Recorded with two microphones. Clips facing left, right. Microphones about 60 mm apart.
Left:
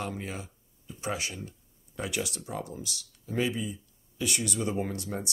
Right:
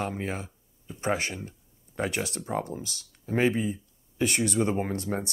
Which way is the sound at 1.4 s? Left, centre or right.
Right.